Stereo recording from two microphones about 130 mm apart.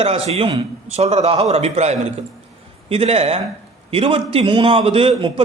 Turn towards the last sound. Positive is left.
turn(degrees=-45)  # may be behind; listen again after turning